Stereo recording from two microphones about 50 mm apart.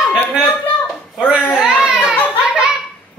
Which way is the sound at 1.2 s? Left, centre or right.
Centre.